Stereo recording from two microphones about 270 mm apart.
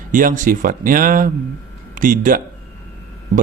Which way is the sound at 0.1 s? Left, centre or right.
Right.